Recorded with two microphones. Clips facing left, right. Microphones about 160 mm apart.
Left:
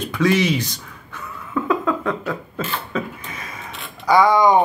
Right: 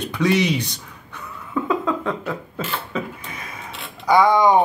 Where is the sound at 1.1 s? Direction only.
15° right (ahead or behind).